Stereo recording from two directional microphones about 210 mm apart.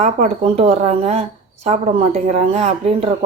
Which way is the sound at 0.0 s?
30° right (ahead or behind).